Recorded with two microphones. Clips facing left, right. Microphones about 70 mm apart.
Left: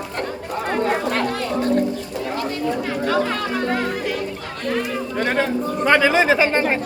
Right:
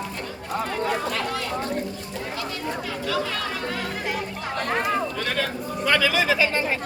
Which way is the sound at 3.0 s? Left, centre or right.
Left.